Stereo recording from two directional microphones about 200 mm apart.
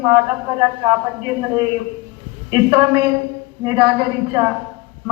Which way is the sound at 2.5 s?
20° right (ahead or behind).